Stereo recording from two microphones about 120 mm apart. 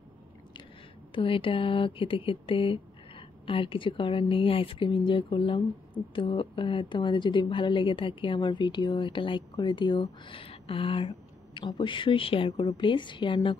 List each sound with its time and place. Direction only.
1.1 s a woman's voice: 45° left (ahead or behind)